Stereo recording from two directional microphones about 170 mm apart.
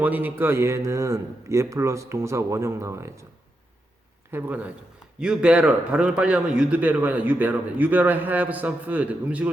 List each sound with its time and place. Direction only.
0.0 s a man's voice: 10° right (ahead or behind)
4.3 s a man's voice: 10° right (ahead or behind)